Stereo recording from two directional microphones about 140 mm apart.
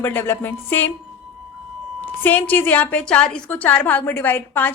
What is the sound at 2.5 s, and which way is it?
A woman's voice, 10° left (ahead or behind).